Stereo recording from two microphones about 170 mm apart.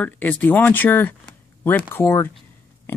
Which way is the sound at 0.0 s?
10° left (ahead or behind).